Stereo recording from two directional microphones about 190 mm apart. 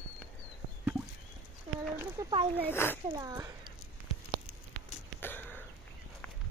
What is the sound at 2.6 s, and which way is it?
Speech, 10° left (ahead or behind).